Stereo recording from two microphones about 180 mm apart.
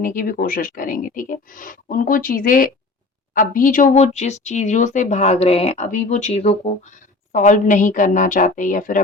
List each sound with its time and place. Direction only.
0.0 s speech: 50° left (ahead or behind)